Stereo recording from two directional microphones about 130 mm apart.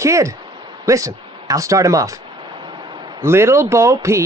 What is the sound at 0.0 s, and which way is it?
Speech, 25° right (ahead or behind).